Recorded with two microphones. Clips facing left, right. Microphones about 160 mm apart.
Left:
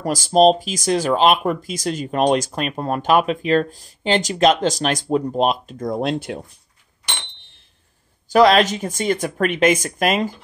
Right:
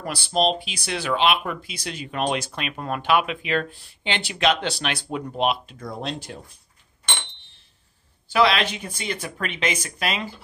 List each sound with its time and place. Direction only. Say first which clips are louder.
0.0 s speech: left 9 dB; 40° left (ahead or behind); by 6.4 s 55° left (ahead or behind)
8.3 s speech: left 7 dB; 45° left (ahead or behind)